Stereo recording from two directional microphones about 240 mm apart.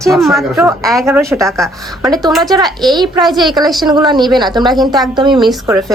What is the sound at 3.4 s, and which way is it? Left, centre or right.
A woman's voice, centre.